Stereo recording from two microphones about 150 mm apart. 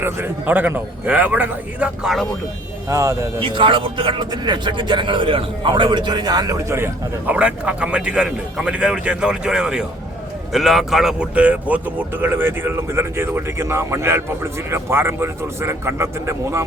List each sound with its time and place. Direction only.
0.0 s speech: 15° right (ahead or behind)
2.9 s a man's voice: 20° right (ahead or behind)
3.4 s a man's voice: 35° right (ahead or behind); by 16.6 s 20° right (ahead or behind)